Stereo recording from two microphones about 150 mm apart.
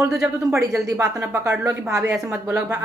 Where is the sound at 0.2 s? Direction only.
5° right (ahead or behind); by 2.1 s 20° right (ahead or behind).